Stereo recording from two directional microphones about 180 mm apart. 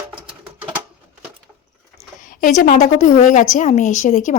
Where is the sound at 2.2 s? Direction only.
50° left (ahead or behind).